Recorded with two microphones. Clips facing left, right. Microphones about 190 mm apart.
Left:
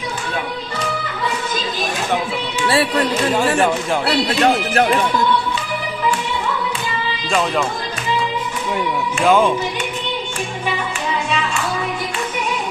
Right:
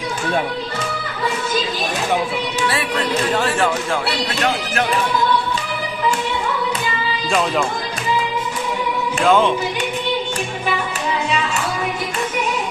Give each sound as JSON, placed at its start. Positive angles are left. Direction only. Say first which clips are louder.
{"t": 3.3, "sound": "speech", "louder": "left 4 dB", "side_deg": 10}
{"t": 4.4, "sound": "speech", "louder": "left 4 dB", "side_deg": 35}
{"t": 7.3, "sound": "speech", "louder": "even", "side_deg": 0}
{"t": 9.2, "sound": "speech", "louder": "left 1 dB", "side_deg": 10}